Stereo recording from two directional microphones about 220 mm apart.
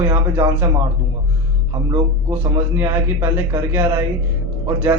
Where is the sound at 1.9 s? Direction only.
10° right (ahead or behind).